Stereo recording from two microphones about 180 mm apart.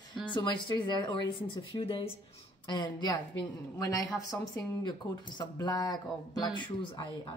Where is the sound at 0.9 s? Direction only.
25° left (ahead or behind).